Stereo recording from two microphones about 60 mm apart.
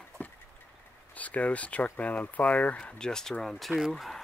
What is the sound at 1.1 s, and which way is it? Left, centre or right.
Speech, left.